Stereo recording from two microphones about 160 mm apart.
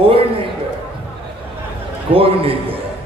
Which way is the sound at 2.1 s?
35° right (ahead or behind).